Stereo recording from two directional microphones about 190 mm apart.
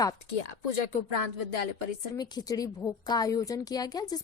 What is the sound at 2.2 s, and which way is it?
A woman's voice, 20° left (ahead or behind).